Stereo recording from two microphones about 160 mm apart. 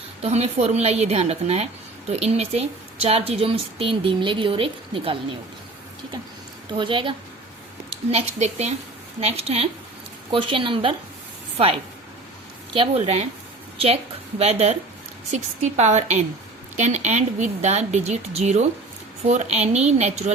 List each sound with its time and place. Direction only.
0.2 s a woman's voice: 40° right (ahead or behind)
6.7 s a woman's voice: 30° right (ahead or behind)
8.1 s a woman's voice: 45° right (ahead or behind)